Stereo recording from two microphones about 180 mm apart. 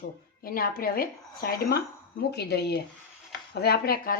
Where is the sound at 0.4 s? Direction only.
55° left (ahead or behind).